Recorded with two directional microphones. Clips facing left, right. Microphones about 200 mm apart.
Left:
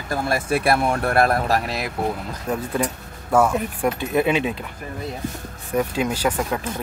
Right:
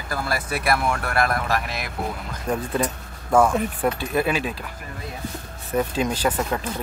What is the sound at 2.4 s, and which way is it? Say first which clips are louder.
Speech: even; 10° left (ahead or behind).